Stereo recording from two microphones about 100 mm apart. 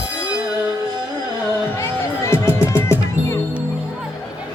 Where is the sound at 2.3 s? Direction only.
25° left (ahead or behind).